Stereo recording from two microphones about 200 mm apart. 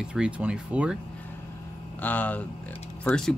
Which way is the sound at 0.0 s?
5° right (ahead or behind).